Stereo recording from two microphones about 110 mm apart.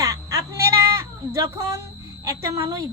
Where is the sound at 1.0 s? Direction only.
25° right (ahead or behind).